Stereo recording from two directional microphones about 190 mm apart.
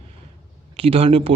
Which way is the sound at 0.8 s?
30° right (ahead or behind).